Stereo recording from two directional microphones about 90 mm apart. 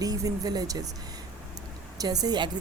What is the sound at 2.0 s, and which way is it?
Speech, 45° right (ahead or behind).